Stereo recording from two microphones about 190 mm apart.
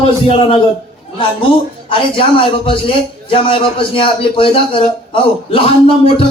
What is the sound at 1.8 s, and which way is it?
A man's voice, 25° left (ahead or behind).